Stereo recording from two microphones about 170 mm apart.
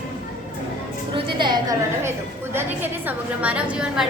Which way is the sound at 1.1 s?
30° right (ahead or behind).